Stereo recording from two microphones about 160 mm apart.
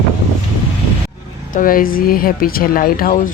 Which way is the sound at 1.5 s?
60° left (ahead or behind).